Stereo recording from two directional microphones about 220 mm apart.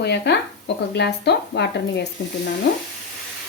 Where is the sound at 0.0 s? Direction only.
50° left (ahead or behind).